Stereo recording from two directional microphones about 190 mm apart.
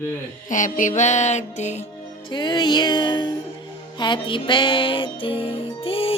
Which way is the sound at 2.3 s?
25° left (ahead or behind).